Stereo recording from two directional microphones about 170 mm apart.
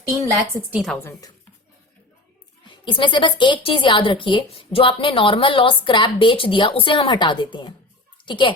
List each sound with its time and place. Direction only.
0.7 s a woman's voice: centre (ahead or behind)
2.6 s a woman's voice: 30° left (ahead or behind)